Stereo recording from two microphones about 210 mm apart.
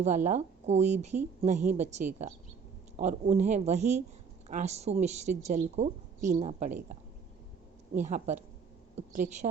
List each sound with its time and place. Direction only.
0.3 s a woman's voice: 30° right (ahead or behind)
8.0 s a woman's voice: 35° right (ahead or behind)